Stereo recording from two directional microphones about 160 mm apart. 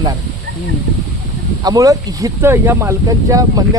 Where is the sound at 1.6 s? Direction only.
20° right (ahead or behind).